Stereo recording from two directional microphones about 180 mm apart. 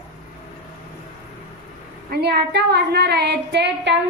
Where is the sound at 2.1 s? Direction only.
65° right (ahead or behind).